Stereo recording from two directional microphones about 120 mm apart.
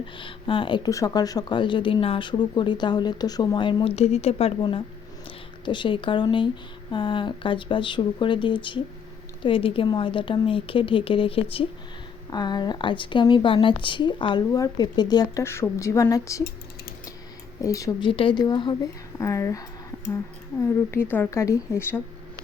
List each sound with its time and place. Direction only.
0.0 s speech: 45° left (ahead or behind)
0.9 s speech: 30° left (ahead or behind); by 11.6 s 50° left (ahead or behind)
12.3 s speech: 35° left (ahead or behind)
15.4 s a woman's voice: 20° left (ahead or behind)
17.6 s a woman's voice: 30° left (ahead or behind)
18.0 s speech: 45° left (ahead or behind)
19.2 s a woman's voice: 25° left (ahead or behind)
20.9 s a woman's voice: 15° left (ahead or behind)